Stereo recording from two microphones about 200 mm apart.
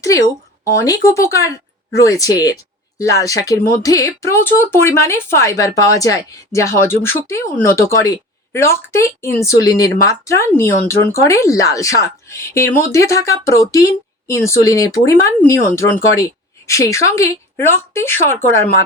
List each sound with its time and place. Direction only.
0.0 s a woman's voice: 15° left (ahead or behind)